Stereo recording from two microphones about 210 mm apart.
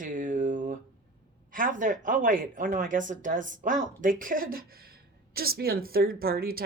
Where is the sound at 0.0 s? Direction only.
40° right (ahead or behind).